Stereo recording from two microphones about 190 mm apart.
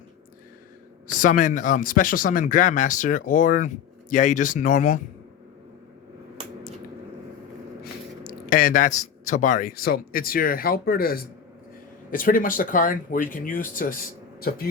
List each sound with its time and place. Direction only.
1.0 s speech: 45° left (ahead or behind)
8.2 s speech: 50° left (ahead or behind)